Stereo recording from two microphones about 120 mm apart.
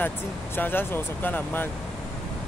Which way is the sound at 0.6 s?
15° left (ahead or behind).